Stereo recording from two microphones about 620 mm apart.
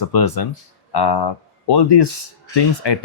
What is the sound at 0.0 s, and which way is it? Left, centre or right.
Speech, left.